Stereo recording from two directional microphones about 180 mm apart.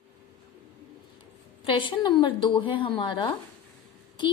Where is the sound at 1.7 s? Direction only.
25° left (ahead or behind).